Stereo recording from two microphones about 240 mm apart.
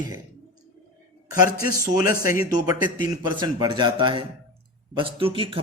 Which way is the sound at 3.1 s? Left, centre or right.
Centre.